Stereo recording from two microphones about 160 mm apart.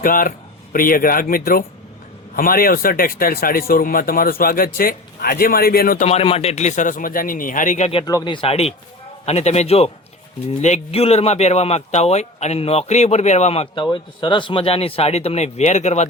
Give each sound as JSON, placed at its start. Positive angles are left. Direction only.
{"t": 0.0, "sound": "speech", "side_deg": 60}
{"t": 6.1, "sound": "speech", "side_deg": 40}
{"t": 8.0, "sound": "speech", "side_deg": 25}